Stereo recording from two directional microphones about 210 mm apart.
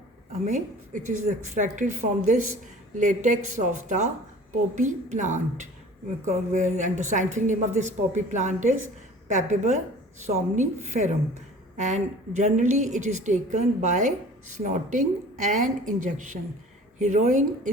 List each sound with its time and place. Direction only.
0.4 s a woman's voice: 35° right (ahead or behind)
1.0 s speech: 80° right
1.5 s a woman's voice: 35° right (ahead or behind)